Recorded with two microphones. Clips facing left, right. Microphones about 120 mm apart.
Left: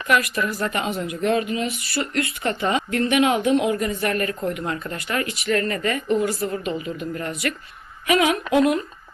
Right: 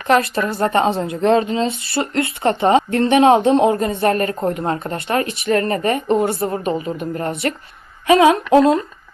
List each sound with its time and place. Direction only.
0.1 s a woman's voice: 30° right (ahead or behind)